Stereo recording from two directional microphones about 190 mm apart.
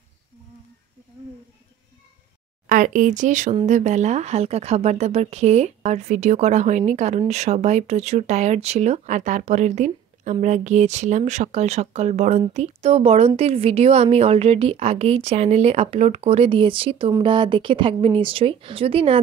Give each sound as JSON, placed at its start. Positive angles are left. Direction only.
{"t": 2.6, "sound": "speech", "side_deg": -45}